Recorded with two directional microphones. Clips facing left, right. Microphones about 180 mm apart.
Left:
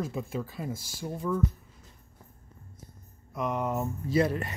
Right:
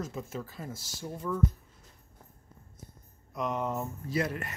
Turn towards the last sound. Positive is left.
turn(degrees=30)  # may be behind; listen again after turning